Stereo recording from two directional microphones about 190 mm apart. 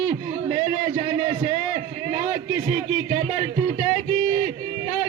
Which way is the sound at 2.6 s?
25° right (ahead or behind).